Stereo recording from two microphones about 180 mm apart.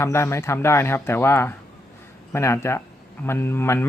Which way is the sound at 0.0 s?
15° left (ahead or behind).